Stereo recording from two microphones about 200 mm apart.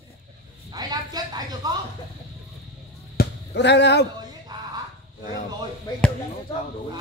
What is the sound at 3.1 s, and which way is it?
Basketball bounce, 60° left (ahead or behind).